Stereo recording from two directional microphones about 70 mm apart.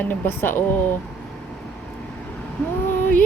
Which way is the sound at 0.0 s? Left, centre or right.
Left.